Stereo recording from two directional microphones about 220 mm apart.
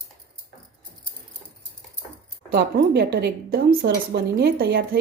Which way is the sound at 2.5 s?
45° right (ahead or behind).